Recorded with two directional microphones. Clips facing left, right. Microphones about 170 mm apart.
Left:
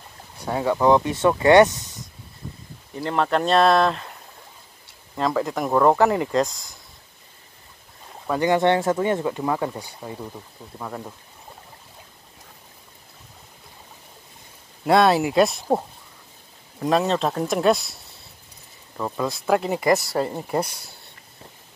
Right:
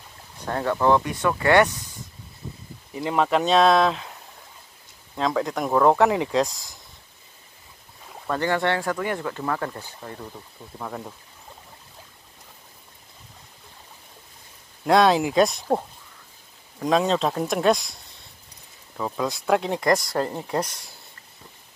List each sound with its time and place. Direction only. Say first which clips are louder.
0.4 s speech: left 2 dB; 10° left (ahead or behind)
2.9 s speech: even; 5° right (ahead or behind)
8.3 s speech: left 4 dB; 15° left (ahead or behind)
14.9 s speech: left 1 dB; 5° left (ahead or behind)
16.8 s speech: even; centre (ahead or behind)